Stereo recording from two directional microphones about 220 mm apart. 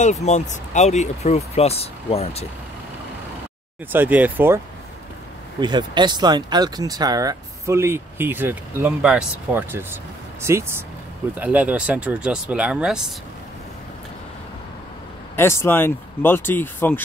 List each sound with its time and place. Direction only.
0.0 s speech: 30° left (ahead or behind)
3.9 s speech: 10° right (ahead or behind)
5.6 s speech: 20° right (ahead or behind); by 13.0 s 5° right (ahead or behind)
15.3 s speech: 10° left (ahead or behind)